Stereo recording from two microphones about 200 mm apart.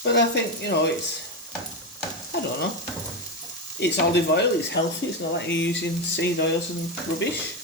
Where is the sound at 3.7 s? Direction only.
60° left (ahead or behind).